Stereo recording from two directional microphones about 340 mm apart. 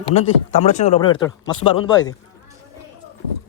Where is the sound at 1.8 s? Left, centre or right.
Centre.